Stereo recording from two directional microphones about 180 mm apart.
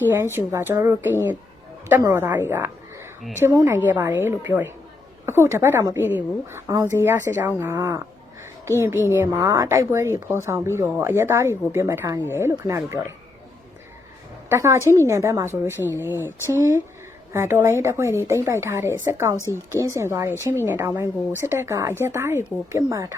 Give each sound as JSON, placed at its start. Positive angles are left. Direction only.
{"t": 0.1, "sound": "a woman's voice", "side_deg": -15}
{"t": 14.5, "sound": "a woman's voice", "side_deg": -15}
{"t": 19.4, "sound": "a woman's voice", "side_deg": 15}
{"t": 19.8, "sound": "a woman's voice", "side_deg": -15}